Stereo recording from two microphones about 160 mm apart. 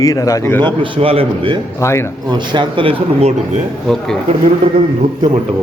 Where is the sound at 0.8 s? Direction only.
35° right (ahead or behind).